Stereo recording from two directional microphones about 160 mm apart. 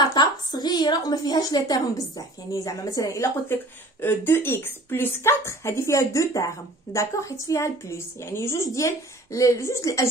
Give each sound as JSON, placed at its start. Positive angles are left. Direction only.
{"t": 0.0, "sound": "a woman's voice", "side_deg": 25}